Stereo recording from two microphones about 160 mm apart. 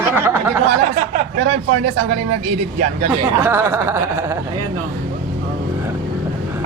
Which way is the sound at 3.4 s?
15° right (ahead or behind).